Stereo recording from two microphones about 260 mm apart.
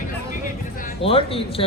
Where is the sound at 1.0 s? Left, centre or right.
Left.